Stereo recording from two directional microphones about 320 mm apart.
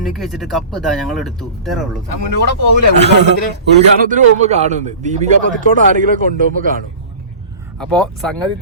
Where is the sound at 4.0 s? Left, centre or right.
Right.